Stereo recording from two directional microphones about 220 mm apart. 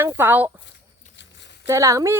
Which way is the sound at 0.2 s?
10° right (ahead or behind).